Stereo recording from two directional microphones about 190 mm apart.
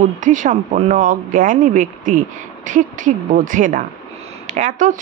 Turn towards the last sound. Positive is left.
turn(degrees=-40)  # may be behind; listen again after turning